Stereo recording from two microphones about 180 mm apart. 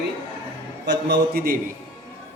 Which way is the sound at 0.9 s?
65° right (ahead or behind).